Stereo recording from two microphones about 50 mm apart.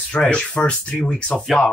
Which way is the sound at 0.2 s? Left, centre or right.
Left.